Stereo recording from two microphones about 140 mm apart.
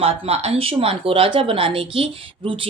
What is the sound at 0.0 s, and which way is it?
Speech, 45° right (ahead or behind).